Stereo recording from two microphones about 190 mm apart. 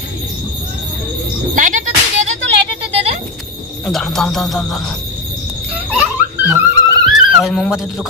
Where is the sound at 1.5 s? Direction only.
40° right (ahead or behind).